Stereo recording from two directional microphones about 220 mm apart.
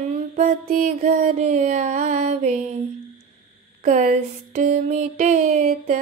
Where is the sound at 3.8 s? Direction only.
35° right (ahead or behind).